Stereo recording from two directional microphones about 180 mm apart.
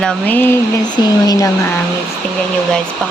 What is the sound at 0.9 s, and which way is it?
Speech, 20° left (ahead or behind).